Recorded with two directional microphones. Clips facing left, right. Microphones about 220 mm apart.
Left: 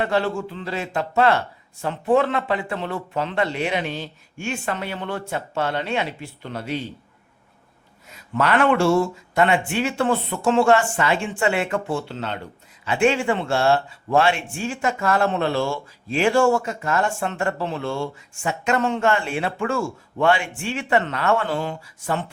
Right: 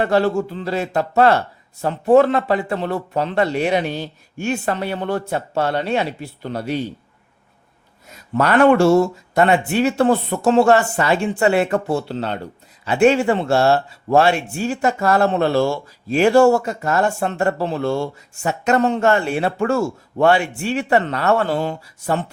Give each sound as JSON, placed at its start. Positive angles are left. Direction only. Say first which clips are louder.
{"t": 0.0, "sound": "speech", "louder": "right 5 dB", "side_deg": -40}
{"t": 8.1, "sound": "speech", "louder": "right 4 dB", "side_deg": -40}